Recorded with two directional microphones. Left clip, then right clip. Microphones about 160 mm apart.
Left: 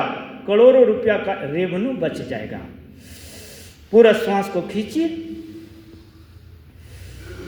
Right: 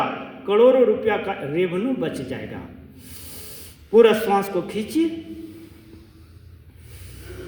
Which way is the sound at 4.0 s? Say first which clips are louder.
Left 2 dB; 35° right (ahead or behind).